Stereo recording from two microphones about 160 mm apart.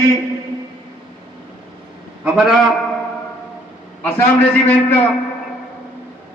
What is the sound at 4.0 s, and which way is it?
Speech, 10° left (ahead or behind).